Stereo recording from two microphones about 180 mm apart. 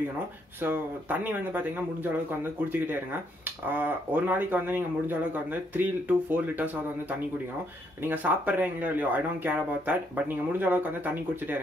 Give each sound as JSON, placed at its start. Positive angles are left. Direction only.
{"t": 0.6, "sound": "speech", "side_deg": -10}
{"t": 3.6, "sound": "speech", "side_deg": -10}